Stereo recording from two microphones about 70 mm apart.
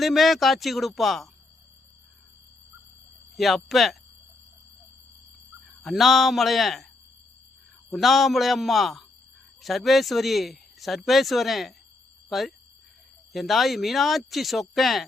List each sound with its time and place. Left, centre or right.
0.0 s speech: centre
3.3 s speech: centre
5.8 s speech: centre
7.9 s speech: centre